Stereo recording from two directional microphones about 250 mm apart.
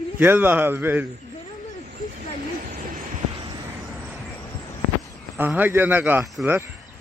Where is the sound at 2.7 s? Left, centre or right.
Right.